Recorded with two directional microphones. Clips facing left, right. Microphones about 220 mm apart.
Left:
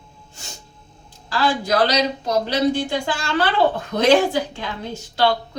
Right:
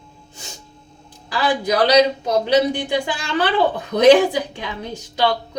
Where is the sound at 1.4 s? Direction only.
15° right (ahead or behind).